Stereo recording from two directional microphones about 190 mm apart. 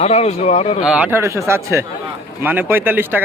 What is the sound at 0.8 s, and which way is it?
Speech, 5° right (ahead or behind).